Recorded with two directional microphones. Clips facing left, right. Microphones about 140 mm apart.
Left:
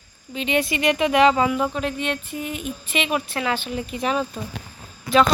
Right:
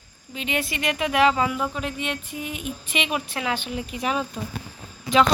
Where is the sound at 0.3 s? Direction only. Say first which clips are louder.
Left 5 dB; 5° right (ahead or behind).